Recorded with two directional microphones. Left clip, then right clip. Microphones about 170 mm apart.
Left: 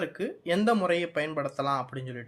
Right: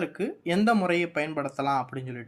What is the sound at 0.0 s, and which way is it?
Speech, 15° right (ahead or behind).